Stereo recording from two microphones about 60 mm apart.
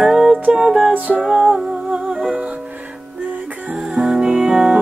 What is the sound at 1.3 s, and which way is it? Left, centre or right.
Music, centre.